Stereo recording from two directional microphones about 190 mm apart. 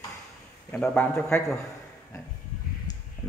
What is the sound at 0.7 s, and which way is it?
Speech, 5° left (ahead or behind).